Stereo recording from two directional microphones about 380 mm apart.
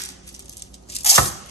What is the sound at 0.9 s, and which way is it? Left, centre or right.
Chopping, centre.